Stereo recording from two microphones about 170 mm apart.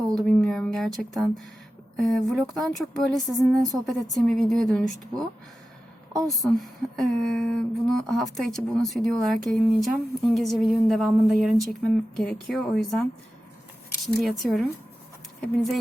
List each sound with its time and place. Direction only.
0.3 s speech: 5° left (ahead or behind)
6.2 s speech: centre (ahead or behind)
14.2 s speech: centre (ahead or behind)